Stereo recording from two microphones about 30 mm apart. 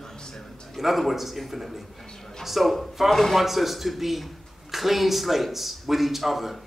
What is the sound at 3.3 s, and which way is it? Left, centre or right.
A man's voice, centre.